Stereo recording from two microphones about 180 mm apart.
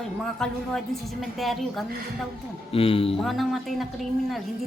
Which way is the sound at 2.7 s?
30° left (ahead or behind).